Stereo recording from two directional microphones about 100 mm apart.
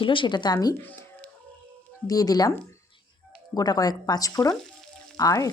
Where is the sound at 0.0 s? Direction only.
55° left (ahead or behind); by 0.8 s 40° left (ahead or behind).